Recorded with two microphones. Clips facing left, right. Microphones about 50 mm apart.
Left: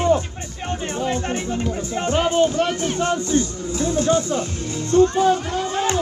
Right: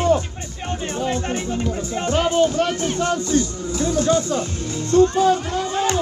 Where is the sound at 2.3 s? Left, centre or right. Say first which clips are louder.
Right 1 dB; left.